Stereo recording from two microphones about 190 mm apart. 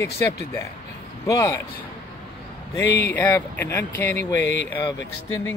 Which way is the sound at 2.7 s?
15° left (ahead or behind).